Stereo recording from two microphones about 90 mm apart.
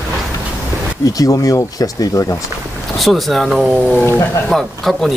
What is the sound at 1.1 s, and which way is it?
Speech, 40° left (ahead or behind).